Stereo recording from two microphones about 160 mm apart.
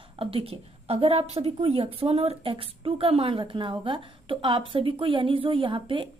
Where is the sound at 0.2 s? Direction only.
35° right (ahead or behind).